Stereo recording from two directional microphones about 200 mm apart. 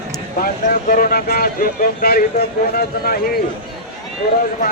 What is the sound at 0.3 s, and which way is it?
Speech, 45° left (ahead or behind).